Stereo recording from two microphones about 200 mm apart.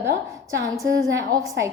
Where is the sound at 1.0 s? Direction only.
20° right (ahead or behind).